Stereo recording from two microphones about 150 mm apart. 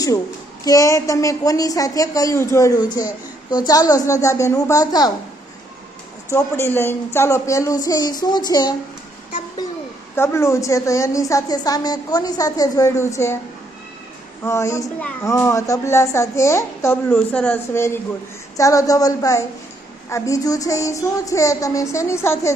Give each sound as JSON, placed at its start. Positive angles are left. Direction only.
{"t": 0.6, "sound": "a woman's voice", "side_deg": 25}
{"t": 6.3, "sound": "a woman's voice", "side_deg": 15}
{"t": 10.2, "sound": "a woman's voice", "side_deg": 20}
{"t": 14.4, "sound": "a woman's voice", "side_deg": 20}